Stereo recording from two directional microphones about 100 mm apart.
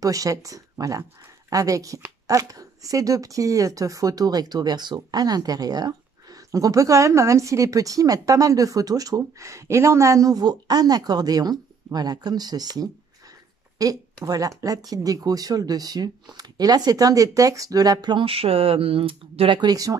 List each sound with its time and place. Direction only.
0.0 s speech: 35° right (ahead or behind)
18.1 s speech: 70° right (ahead or behind)
19.6 s speech: 40° right (ahead or behind)